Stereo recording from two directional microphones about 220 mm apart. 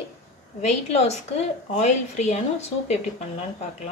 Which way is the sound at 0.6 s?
30° left (ahead or behind).